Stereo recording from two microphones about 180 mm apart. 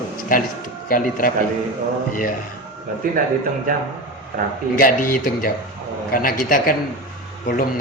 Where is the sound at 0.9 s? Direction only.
50° left (ahead or behind).